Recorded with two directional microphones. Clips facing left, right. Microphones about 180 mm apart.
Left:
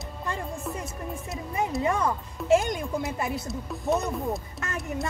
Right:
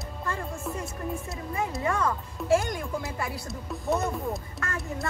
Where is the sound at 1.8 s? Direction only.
20° left (ahead or behind).